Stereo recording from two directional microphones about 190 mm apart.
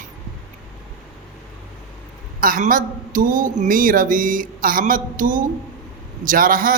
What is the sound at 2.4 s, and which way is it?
Speech, 45° right (ahead or behind).